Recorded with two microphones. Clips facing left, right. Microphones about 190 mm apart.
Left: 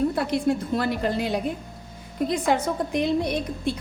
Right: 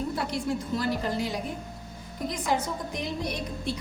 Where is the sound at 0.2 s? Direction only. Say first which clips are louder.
Left 6 dB; 60° left (ahead or behind).